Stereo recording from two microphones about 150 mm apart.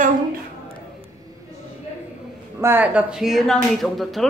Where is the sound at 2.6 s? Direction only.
15° right (ahead or behind).